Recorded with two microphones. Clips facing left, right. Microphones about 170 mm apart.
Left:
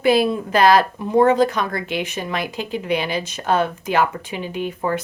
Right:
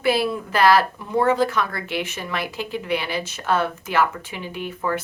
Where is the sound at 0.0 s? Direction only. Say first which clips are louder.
Left 4 dB; 20° left (ahead or behind).